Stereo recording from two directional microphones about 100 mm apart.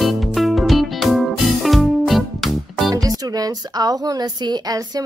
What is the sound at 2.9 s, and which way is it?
A woman's voice, 40° right (ahead or behind).